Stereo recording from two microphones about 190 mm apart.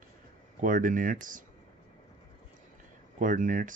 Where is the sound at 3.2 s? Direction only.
45° right (ahead or behind).